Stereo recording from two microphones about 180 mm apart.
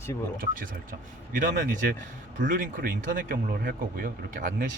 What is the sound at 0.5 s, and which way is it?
Speech, 50° right (ahead or behind).